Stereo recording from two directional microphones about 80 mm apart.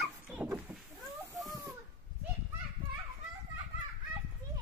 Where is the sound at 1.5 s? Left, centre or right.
Right.